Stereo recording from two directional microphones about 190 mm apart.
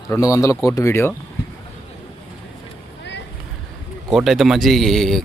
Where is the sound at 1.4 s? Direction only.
60° left (ahead or behind).